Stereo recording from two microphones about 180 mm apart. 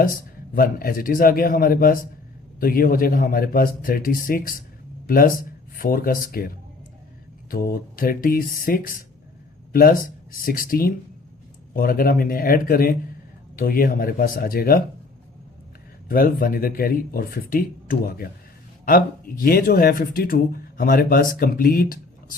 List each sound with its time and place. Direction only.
0.5 s speech: 55° left (ahead or behind)
7.5 s speech: 55° left (ahead or behind)
16.0 s speech: 50° left (ahead or behind)